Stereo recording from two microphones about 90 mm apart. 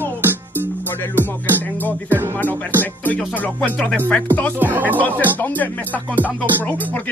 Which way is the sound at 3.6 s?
20° left (ahead or behind).